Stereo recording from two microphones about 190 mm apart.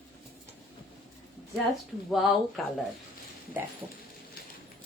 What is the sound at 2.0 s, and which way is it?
Speech, centre (ahead or behind).